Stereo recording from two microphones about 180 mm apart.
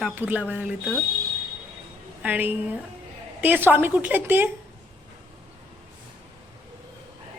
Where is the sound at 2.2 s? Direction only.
10° right (ahead or behind).